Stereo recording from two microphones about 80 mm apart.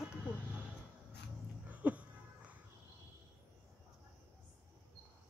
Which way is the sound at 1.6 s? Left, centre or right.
Centre.